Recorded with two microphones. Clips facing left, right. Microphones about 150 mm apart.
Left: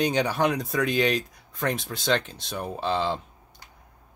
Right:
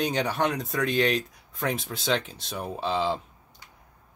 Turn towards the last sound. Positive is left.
turn(degrees=0)  # may be behind; listen again after turning